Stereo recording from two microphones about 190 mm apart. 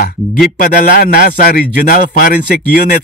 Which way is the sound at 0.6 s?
50° left (ahead or behind).